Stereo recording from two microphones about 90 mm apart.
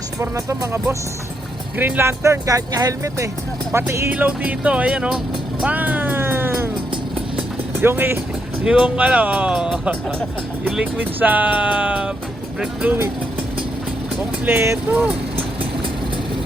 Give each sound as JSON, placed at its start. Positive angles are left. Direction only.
{"t": 0.2, "sound": "speech", "side_deg": -35}
{"t": 3.7, "sound": "speech", "side_deg": -30}
{"t": 4.1, "sound": "speech", "side_deg": -15}
{"t": 5.6, "sound": "music", "side_deg": -15}
{"t": 7.8, "sound": "speech", "side_deg": -25}
{"t": 8.6, "sound": "speech", "side_deg": -10}
{"t": 10.9, "sound": "speech", "side_deg": -20}
{"t": 14.4, "sound": "speech", "side_deg": -25}